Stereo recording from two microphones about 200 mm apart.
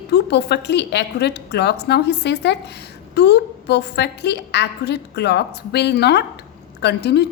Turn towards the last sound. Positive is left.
turn(degrees=55)  # may be behind; listen again after turning